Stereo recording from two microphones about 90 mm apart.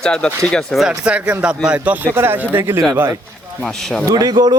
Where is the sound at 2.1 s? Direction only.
25° right (ahead or behind).